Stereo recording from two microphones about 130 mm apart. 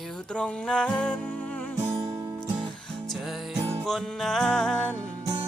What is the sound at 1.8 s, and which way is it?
Music, 25° right (ahead or behind).